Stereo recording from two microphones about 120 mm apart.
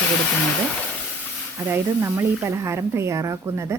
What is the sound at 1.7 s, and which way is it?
A woman's voice, 20° right (ahead or behind).